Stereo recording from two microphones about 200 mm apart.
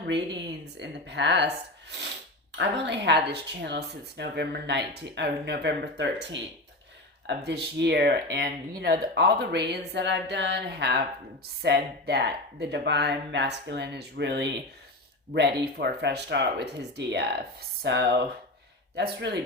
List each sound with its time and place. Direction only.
0.6 s speech: 60° right (ahead or behind)
2.5 s speech: 60° right (ahead or behind)